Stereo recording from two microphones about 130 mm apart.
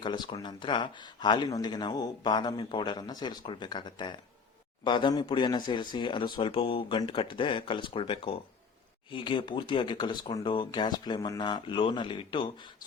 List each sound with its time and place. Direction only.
0.0 s speech: 35° left (ahead or behind)